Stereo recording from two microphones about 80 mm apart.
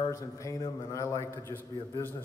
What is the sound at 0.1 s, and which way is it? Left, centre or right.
A man's voice, left.